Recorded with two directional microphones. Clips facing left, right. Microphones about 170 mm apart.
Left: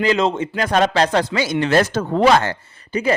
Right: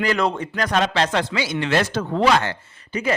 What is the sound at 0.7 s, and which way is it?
Speech, 40° left (ahead or behind).